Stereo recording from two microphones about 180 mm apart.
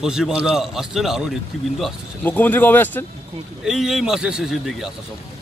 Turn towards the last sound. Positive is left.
turn(degrees=0)  # may be behind; listen again after turning